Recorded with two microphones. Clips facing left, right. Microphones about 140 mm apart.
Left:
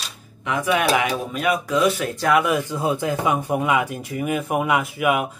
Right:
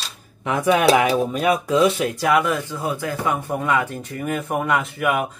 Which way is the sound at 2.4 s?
10° left (ahead or behind).